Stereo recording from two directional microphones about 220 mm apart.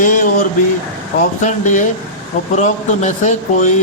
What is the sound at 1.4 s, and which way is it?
A man's voice, 35° left (ahead or behind).